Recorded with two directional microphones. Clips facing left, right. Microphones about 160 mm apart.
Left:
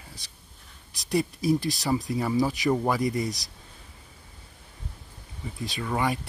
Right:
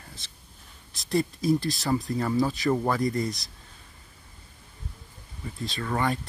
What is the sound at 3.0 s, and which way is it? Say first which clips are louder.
Speech: even; 20° left (ahead or behind).